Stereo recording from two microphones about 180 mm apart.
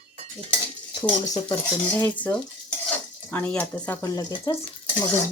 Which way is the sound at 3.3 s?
10° left (ahead or behind).